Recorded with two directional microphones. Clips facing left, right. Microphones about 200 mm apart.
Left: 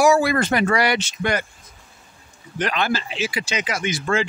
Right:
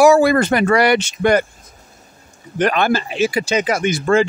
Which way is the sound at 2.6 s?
55° right (ahead or behind).